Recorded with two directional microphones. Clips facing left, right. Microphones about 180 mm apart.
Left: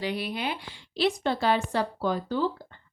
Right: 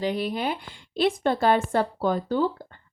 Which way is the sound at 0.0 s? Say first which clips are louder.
Right 4 dB; 45° right (ahead or behind).